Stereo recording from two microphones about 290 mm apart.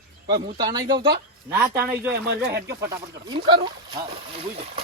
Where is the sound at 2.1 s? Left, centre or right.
Right.